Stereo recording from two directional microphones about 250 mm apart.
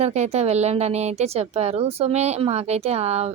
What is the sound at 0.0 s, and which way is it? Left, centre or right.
Speech, right.